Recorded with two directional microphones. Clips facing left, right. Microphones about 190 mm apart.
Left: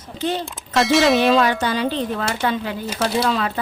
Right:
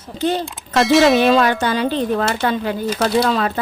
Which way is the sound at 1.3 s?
50° right (ahead or behind).